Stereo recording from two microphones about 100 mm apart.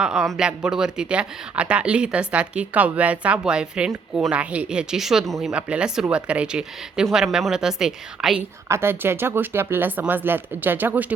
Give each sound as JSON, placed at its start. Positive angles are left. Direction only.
{"t": 0.0, "sound": "speech", "side_deg": -5}
{"t": 8.6, "sound": "speech", "side_deg": -25}